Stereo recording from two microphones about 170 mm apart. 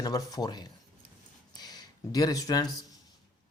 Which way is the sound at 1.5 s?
25° left (ahead or behind).